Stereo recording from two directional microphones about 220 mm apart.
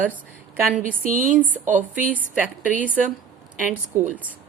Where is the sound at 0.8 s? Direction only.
40° right (ahead or behind).